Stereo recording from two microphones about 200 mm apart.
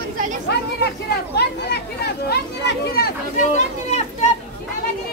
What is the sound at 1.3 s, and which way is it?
Speech, 55° left (ahead or behind).